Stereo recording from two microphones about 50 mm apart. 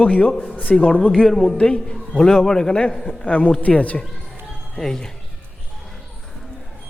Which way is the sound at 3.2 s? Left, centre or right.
Left.